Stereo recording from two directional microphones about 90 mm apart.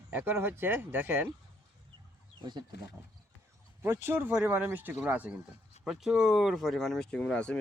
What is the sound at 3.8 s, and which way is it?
Speech, 25° right (ahead or behind).